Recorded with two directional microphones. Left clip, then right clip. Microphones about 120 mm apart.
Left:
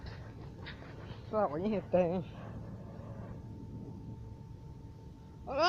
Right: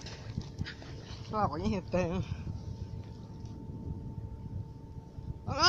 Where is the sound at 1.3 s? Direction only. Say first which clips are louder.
Even; 90° right.